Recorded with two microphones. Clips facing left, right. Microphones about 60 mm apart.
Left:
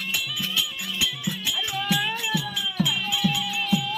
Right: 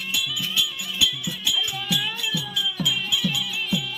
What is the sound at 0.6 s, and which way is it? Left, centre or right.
Music, left.